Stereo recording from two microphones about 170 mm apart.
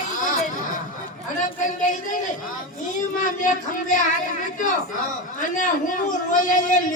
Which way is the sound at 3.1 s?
50° left (ahead or behind).